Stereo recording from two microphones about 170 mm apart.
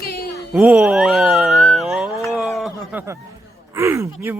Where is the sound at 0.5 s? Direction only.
5° right (ahead or behind).